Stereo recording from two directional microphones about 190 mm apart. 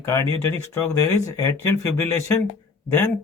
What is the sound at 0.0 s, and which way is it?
Speech, 15° left (ahead or behind).